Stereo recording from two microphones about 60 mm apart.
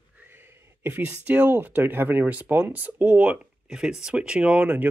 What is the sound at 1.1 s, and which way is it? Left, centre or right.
Speech, right.